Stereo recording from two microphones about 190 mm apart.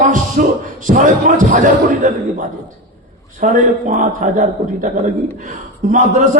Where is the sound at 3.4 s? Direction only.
40° right (ahead or behind).